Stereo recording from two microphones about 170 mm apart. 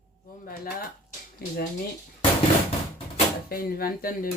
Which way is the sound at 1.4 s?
60° left (ahead or behind).